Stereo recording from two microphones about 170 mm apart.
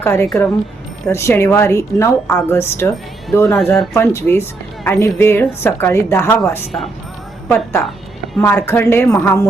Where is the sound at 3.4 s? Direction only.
5° left (ahead or behind).